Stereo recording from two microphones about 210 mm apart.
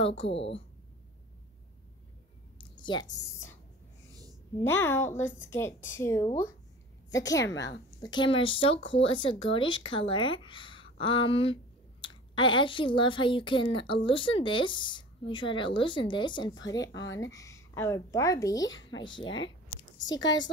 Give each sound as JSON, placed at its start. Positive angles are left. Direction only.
{"t": 0.0, "sound": "speech", "side_deg": 25}
{"t": 0.3, "sound": "speech", "side_deg": 60}
{"t": 2.7, "sound": "a sound", "side_deg": 20}
{"t": 4.6, "sound": "speech", "side_deg": 10}
{"t": 18.7, "sound": "speech", "side_deg": 65}
{"t": 19.0, "sound": "speech", "side_deg": 20}